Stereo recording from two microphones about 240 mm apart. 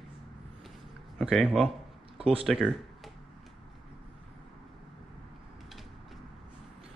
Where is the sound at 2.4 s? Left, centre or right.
Centre.